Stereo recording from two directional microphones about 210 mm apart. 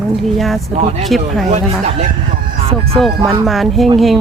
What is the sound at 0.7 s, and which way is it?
Speech, 30° right (ahead or behind).